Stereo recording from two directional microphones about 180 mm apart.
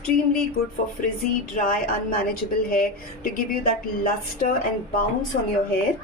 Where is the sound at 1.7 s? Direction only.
50° left (ahead or behind).